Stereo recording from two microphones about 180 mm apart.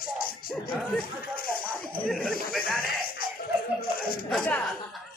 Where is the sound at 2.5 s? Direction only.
5° left (ahead or behind).